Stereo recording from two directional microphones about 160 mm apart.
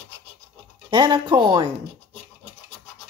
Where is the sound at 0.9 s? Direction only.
30° right (ahead or behind).